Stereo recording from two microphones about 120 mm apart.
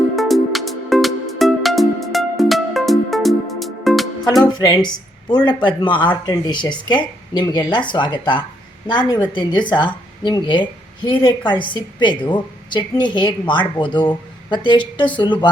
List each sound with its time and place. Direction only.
0.2 s music: centre (ahead or behind)
4.5 s a woman's voice: 35° left (ahead or behind)